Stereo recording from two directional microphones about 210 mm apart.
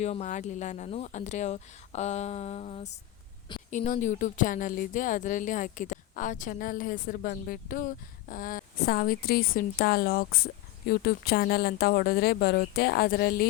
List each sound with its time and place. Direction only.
0.0 s a woman's voice: 35° left (ahead or behind)